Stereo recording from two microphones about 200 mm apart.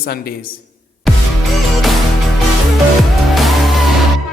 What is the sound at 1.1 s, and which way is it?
Music, centre (ahead or behind).